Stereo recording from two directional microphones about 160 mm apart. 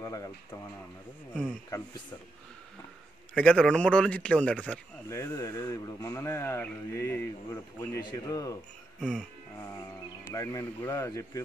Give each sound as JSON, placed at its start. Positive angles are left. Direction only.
{"t": 0.0, "sound": "speech", "side_deg": 20}
{"t": 1.7, "sound": "speech", "side_deg": 25}
{"t": 3.3, "sound": "speech", "side_deg": 5}
{"t": 10.3, "sound": "speech", "side_deg": 20}